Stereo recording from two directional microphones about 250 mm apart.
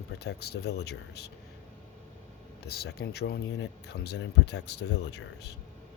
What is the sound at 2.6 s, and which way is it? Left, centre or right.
Speech, left.